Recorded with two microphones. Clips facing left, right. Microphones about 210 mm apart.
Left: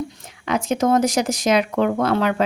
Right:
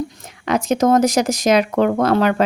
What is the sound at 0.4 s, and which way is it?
Speech, 40° right (ahead or behind).